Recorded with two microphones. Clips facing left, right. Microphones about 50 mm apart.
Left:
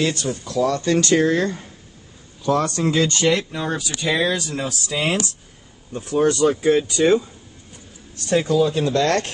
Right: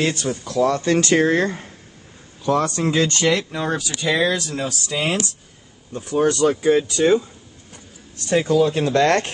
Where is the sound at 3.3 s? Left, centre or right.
Right.